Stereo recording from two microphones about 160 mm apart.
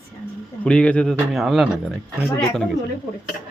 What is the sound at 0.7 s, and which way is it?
Speech, 5° left (ahead or behind).